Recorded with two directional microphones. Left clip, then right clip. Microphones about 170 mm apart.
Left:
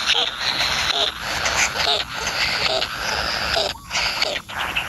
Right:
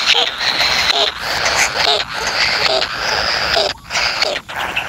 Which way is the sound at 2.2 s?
25° right (ahead or behind).